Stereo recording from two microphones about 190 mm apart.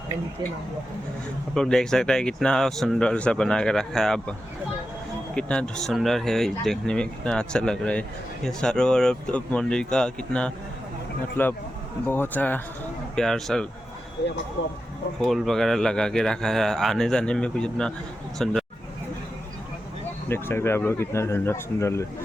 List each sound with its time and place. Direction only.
1.5 s speech: 5° left (ahead or behind)
14.6 s speech: 60° left (ahead or behind)
15.2 s speech: centre (ahead or behind)
20.2 s speech: 10° left (ahead or behind)